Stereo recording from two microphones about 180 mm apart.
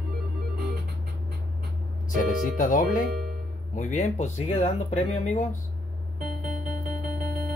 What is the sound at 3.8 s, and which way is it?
Speech, 40° left (ahead or behind).